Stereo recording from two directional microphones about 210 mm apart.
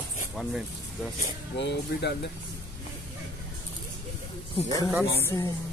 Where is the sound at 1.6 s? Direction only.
55° left (ahead or behind).